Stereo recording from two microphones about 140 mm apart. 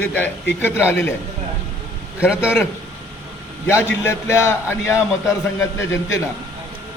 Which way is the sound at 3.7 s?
20° left (ahead or behind).